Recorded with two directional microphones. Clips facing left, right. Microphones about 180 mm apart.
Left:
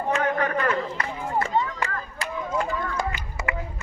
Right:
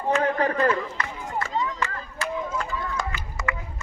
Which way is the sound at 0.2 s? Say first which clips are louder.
Right 2 dB; 35° right (ahead or behind).